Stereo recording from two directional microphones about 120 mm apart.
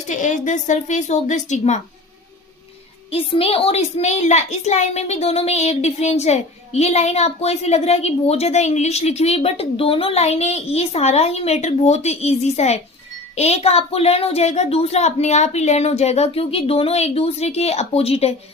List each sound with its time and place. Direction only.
0.1 s a woman's voice: 90° left
3.1 s a child's voice: 50° left (ahead or behind)